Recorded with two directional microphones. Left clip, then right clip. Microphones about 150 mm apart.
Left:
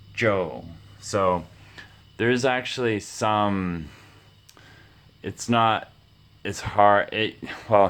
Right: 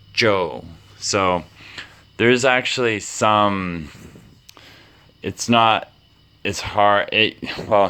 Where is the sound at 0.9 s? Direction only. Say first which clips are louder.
Right 4 dB; 25° right (ahead or behind); by 4.0 s 10° right (ahead or behind).